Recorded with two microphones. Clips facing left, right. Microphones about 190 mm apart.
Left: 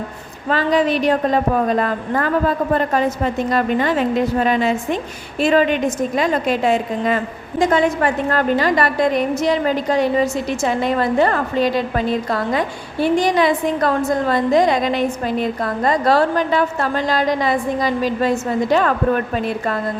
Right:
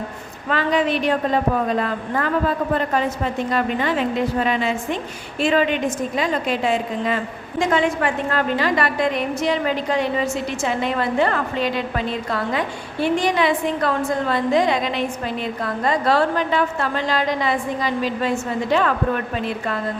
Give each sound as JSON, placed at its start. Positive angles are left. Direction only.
{"t": 0.4, "sound": "a woman's voice", "side_deg": 35}
{"t": 3.5, "sound": "a woman's voice", "side_deg": 45}